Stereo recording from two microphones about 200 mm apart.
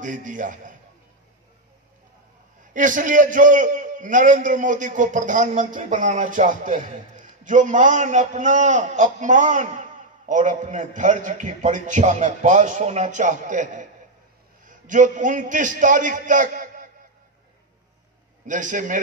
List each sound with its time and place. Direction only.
0.0 s a man's voice: 40° right (ahead or behind)
2.7 s a man's voice: 40° right (ahead or behind)
18.5 s a man's voice: 40° right (ahead or behind)